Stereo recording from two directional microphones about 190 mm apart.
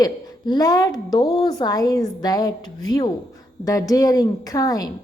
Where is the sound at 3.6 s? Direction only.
20° left (ahead or behind).